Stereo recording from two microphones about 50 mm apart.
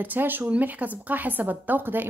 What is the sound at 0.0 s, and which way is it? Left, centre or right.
Speech, right.